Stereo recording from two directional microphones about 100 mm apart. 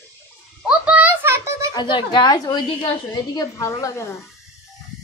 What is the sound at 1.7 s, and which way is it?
Speech, 50° left (ahead or behind).